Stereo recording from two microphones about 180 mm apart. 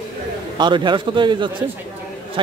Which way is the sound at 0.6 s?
25° right (ahead or behind).